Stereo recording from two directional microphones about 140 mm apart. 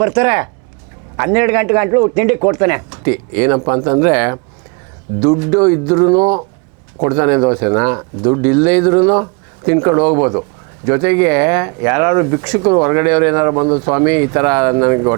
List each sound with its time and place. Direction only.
0.0 s speech: 20° right (ahead or behind)